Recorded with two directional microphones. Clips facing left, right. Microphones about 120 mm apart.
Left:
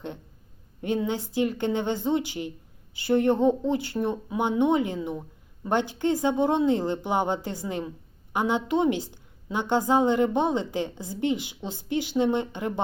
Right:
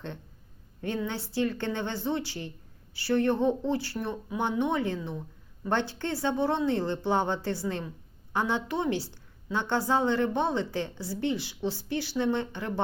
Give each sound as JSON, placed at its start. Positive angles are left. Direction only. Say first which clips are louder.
{"t": 0.8, "sound": "a woman's voice", "louder": "left 5 dB", "side_deg": 20}